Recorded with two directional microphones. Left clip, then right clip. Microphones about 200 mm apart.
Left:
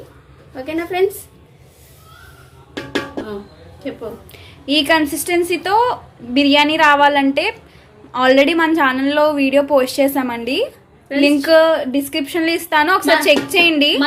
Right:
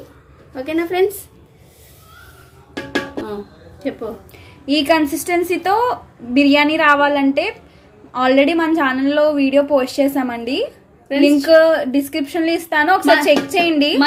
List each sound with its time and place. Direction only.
0.5 s a woman's voice: 60° right (ahead or behind)
4.3 s a woman's voice: 10° right (ahead or behind)